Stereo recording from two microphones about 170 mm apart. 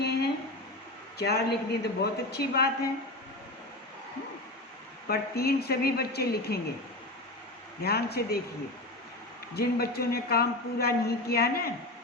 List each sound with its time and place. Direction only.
0.0 s a sound: 70° left (ahead or behind)
1.2 s speech: 70° left (ahead or behind)
5.0 s speech: 65° left (ahead or behind)
7.9 s speech: 65° left (ahead or behind)
9.6 s a woman's voice: 65° left (ahead or behind)